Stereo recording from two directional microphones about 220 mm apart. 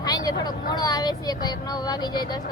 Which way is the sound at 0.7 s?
15° left (ahead or behind).